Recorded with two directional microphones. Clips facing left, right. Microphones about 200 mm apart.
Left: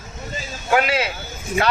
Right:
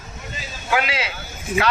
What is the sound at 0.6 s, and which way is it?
Speech, 50° left (ahead or behind).